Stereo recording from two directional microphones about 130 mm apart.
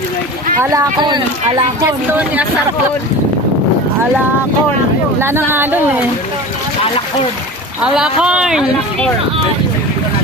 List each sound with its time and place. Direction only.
0.6 s speech: 25° right (ahead or behind)
1.8 s speech: 15° right (ahead or behind)
5.2 s speech: 15° right (ahead or behind)
7.9 s speech: 5° right (ahead or behind)